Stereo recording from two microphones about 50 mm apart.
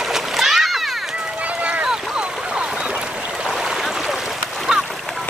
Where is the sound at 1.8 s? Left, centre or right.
Centre.